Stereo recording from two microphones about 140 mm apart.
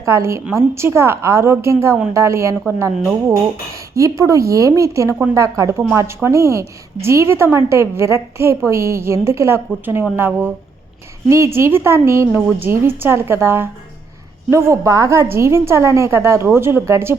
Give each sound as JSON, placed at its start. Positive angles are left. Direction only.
{"t": 0.0, "sound": "a woman's voice", "side_deg": -20}
{"t": 3.9, "sound": "a woman's voice", "side_deg": -25}